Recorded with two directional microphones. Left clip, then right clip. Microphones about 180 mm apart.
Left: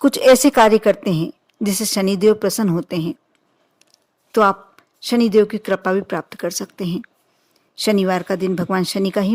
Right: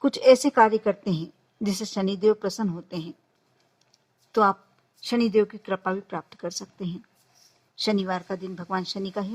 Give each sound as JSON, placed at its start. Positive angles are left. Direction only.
{"t": 0.0, "sound": "a woman's voice", "side_deg": 50}